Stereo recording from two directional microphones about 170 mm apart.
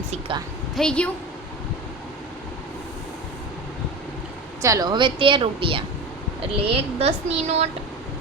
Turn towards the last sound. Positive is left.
turn(degrees=-40)  # may be behind; listen again after turning